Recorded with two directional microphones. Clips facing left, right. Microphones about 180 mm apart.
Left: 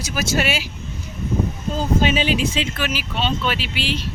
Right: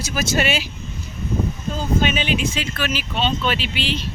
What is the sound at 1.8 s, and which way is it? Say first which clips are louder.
Speech: left 2 dB; 35° left (ahead or behind).